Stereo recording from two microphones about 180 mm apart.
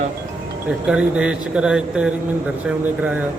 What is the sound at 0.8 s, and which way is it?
Speech, 5° right (ahead or behind).